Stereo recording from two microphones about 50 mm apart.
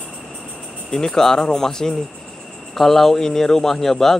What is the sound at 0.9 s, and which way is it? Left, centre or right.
Speech, centre.